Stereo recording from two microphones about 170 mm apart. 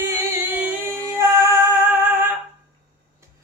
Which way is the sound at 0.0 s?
10° right (ahead or behind).